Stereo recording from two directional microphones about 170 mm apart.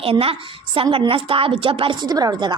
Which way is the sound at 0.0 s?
35° right (ahead or behind).